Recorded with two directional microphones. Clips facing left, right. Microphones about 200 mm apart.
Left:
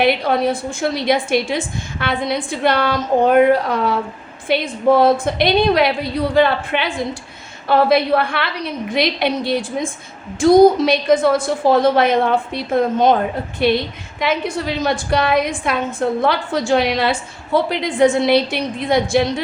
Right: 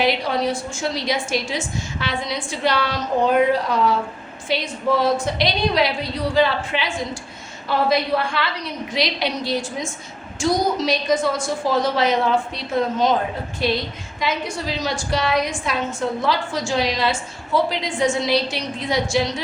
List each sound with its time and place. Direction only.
0.0 s a woman's voice: 55° left (ahead or behind)